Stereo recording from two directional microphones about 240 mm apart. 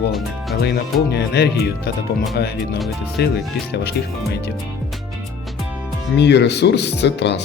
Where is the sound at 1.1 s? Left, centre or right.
Left.